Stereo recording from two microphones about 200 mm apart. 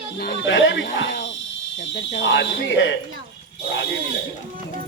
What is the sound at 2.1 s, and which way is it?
Speech, 65° left (ahead or behind).